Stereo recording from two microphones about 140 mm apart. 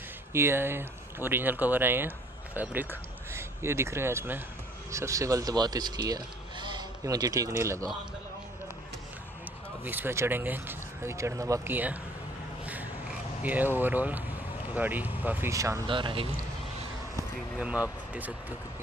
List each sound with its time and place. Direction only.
0.3 s speech: 15° right (ahead or behind)
9.8 s speech: 15° right (ahead or behind)
13.4 s speech: 10° right (ahead or behind)
15.9 s speech: 35° right (ahead or behind)
17.6 s speech: 5° right (ahead or behind)